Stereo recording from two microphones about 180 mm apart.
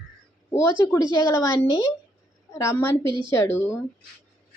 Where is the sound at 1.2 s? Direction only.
15° left (ahead or behind).